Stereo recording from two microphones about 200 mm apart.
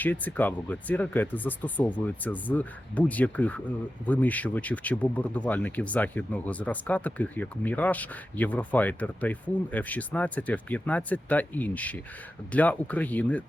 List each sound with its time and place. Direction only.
0.0 s speech: 10° left (ahead or behind)